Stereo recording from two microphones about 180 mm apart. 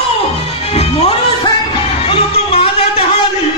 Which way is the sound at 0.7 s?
35° left (ahead or behind).